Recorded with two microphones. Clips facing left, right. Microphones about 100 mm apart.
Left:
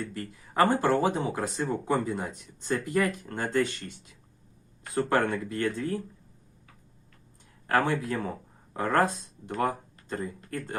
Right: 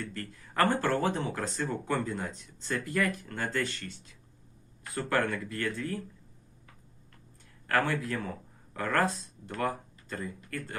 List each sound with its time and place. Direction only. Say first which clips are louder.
0.0 s speech: left 3 dB; 15° left (ahead or behind)
7.7 s speech: left 3 dB; 20° left (ahead or behind)